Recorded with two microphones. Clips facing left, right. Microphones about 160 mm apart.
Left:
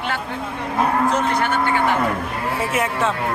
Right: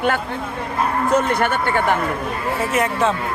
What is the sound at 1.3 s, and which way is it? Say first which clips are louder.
Speech: right 1 dB; 55° right (ahead or behind).